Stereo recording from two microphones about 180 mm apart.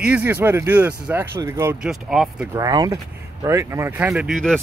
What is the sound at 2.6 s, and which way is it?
Speech, 20° right (ahead or behind).